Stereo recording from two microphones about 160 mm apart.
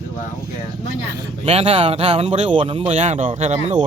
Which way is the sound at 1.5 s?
40° right (ahead or behind).